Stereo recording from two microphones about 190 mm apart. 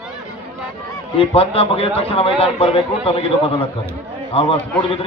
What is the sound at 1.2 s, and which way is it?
A man's voice, 30° left (ahead or behind).